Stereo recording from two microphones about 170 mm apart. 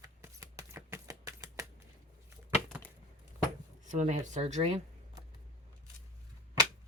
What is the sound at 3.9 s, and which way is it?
Speech, 45° right (ahead or behind).